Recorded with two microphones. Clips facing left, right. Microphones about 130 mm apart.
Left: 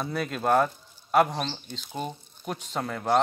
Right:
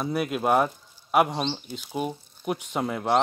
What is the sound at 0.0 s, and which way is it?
Speech, 10° right (ahead or behind).